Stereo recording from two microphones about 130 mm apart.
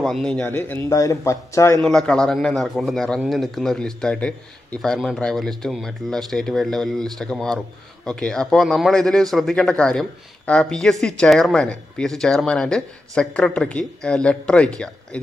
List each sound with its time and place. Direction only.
0.0 s a man's voice: 5° left (ahead or behind)
0.5 s speech: 20° left (ahead or behind)
1.8 s a man's voice: 5° left (ahead or behind)